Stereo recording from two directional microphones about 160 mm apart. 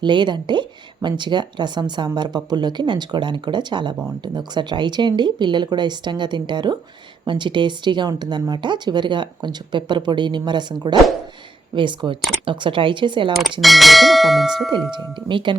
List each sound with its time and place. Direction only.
0.0 s speech: 30° right (ahead or behind)
13.6 s speech: centre (ahead or behind)
14.9 s speech: 30° right (ahead or behind)